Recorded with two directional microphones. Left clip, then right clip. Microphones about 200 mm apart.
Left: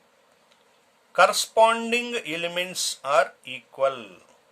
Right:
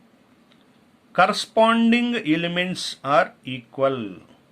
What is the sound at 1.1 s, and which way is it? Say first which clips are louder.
Speech: right 1 dB; 20° left (ahead or behind).